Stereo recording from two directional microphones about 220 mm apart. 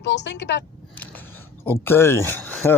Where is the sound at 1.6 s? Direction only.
10° left (ahead or behind).